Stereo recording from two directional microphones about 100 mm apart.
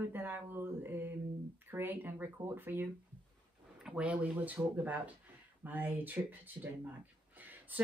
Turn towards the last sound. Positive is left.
turn(degrees=-15)  # may be behind; listen again after turning